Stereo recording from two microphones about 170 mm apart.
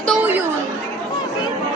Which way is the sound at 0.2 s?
10° right (ahead or behind).